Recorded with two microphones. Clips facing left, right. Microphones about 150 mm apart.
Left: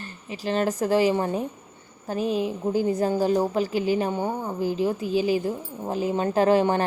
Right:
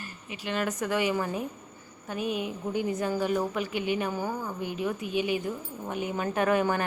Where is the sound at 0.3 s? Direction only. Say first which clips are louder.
Left 6 dB; 35° left (ahead or behind).